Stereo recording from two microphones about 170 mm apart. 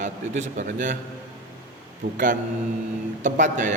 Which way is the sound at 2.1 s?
50° right (ahead or behind).